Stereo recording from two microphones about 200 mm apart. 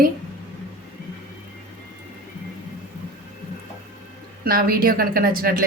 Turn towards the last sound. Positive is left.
turn(degrees=-45)  # may be behind; listen again after turning